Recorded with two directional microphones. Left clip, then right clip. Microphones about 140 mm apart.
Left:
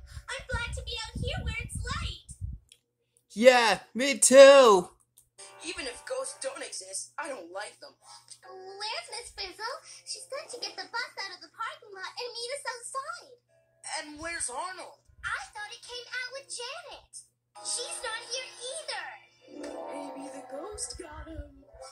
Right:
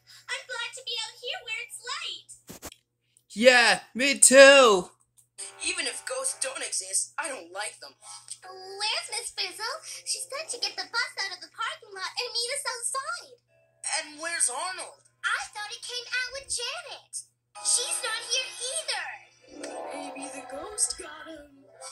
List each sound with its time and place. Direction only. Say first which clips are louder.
0.3 s a sound: right 2 dB; 10° right (ahead or behind)
3.4 s speech: right 2 dB; centre (ahead or behind)
5.4 s music: right 7 dB; 20° right (ahead or behind)
13.8 s a woman's voice: right 4 dB; 20° right (ahead or behind)